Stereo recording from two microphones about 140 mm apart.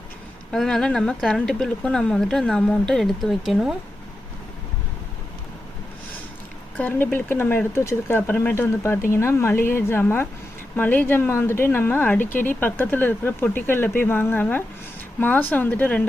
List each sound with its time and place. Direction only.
0.5 s speech: 5° left (ahead or behind)
6.7 s speech: 10° left (ahead or behind)